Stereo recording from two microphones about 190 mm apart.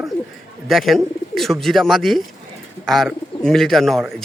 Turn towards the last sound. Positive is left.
turn(degrees=0)  # may be behind; listen again after turning